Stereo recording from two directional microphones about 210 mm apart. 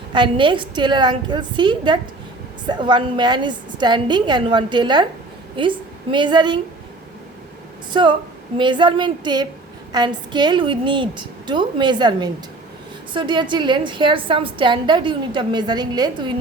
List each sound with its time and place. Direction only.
0.1 s a woman's voice: 25° right (ahead or behind)
8.5 s a woman's voice: 20° right (ahead or behind)